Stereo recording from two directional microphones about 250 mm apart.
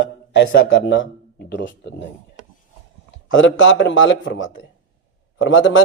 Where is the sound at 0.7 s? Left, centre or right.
Left.